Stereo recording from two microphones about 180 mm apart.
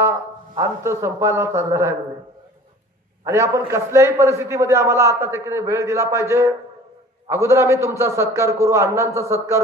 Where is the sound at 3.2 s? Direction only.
15° right (ahead or behind).